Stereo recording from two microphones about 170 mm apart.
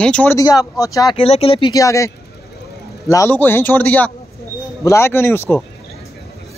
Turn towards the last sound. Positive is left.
turn(degrees=15)  # may be behind; listen again after turning